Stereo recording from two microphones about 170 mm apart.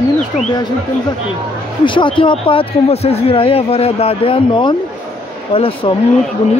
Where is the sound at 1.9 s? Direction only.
30° left (ahead or behind).